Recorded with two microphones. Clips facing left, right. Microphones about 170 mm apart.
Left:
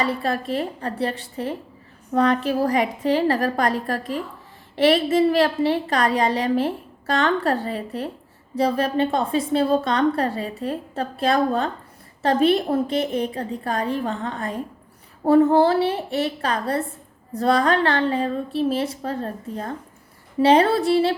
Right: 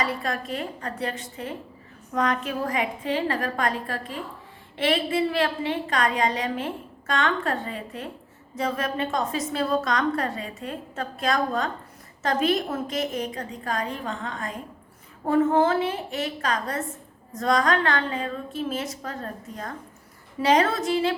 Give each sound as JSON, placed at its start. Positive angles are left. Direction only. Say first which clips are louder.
{"t": 0.0, "sound": "a woman's voice", "louder": "left 5 dB", "side_deg": 30}